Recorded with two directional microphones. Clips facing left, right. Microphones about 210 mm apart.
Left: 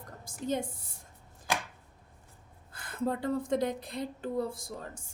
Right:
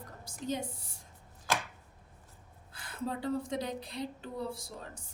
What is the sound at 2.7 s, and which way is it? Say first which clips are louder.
A woman's voice: left 5 dB; 50° left (ahead or behind).